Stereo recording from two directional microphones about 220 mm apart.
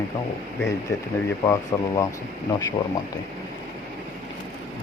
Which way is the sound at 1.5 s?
15° left (ahead or behind).